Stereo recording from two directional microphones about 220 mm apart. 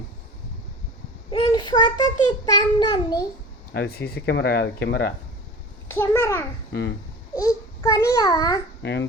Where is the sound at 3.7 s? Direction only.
45° left (ahead or behind).